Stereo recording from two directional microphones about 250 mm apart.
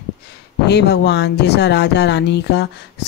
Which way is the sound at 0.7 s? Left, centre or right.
Left.